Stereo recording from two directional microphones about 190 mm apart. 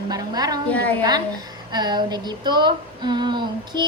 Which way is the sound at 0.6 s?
5° left (ahead or behind).